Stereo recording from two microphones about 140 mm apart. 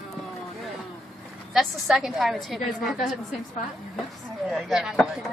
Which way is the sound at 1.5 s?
5° right (ahead or behind).